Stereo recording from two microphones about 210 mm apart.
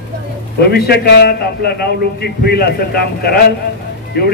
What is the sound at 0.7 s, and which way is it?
Speech, 50° left (ahead or behind).